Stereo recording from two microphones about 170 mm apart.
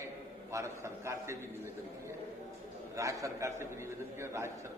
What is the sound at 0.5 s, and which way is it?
A man's voice, 15° right (ahead or behind).